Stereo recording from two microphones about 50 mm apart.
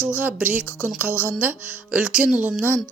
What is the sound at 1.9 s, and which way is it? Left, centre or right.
Speech, centre.